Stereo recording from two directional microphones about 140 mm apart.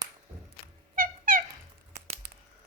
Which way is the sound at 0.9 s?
85° right.